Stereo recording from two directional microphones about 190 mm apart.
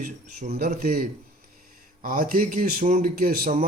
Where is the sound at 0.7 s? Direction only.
50° right (ahead or behind).